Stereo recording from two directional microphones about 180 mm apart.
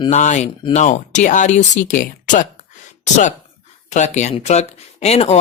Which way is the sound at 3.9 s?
40° left (ahead or behind).